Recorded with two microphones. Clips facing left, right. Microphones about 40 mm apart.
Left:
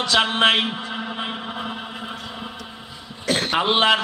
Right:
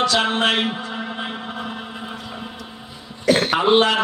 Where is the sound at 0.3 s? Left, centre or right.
Centre.